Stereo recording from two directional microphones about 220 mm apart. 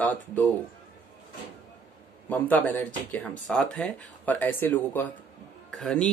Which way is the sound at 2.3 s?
5° left (ahead or behind).